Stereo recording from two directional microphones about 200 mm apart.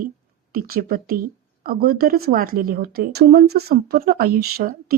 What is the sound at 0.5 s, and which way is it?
A woman's voice, 45° right (ahead or behind).